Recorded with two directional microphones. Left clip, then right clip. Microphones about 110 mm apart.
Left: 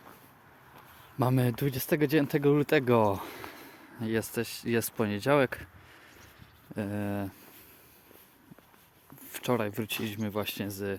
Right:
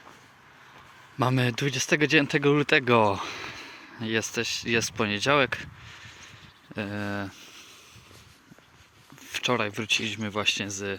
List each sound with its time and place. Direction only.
1.2 s speech: 15° left (ahead or behind)
9.2 s speech: 35° left (ahead or behind)
10.7 s speech: 35° left (ahead or behind)